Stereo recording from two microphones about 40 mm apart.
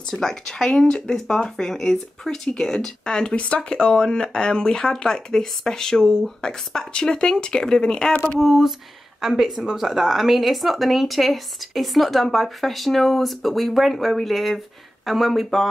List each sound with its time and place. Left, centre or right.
0.1 s speech: centre
3.3 s speech: left
8.4 s speech: centre